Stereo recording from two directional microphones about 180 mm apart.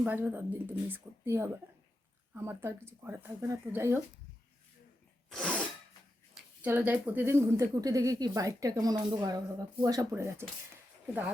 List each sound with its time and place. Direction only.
0.0 s speech: 10° right (ahead or behind)
5.3 s sneeze: 5° left (ahead or behind)
6.6 s speech: 10° right (ahead or behind)